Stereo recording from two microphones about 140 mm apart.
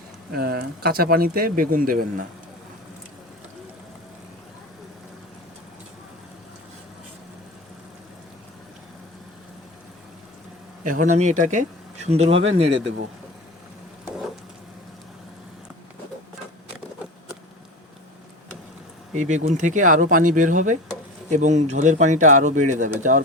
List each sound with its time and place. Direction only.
0.3 s speech: 90° right
10.8 s speech: 65° right (ahead or behind); by 12.6 s 50° right (ahead or behind)
19.1 s speech: 60° right (ahead or behind)